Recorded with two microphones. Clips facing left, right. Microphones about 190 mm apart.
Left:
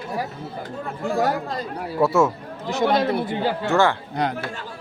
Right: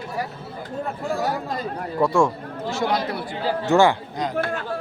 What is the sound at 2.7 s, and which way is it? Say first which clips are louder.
Speech: left 4 dB; 20° left (ahead or behind).